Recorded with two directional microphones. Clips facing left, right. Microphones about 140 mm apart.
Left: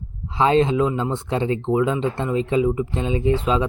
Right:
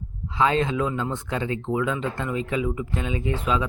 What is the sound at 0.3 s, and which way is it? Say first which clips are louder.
Speech: left 5 dB; 30° left (ahead or behind).